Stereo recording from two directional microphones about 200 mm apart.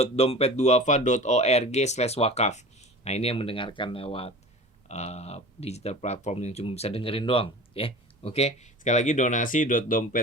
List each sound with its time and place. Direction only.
0.0 s speech: 30° left (ahead or behind)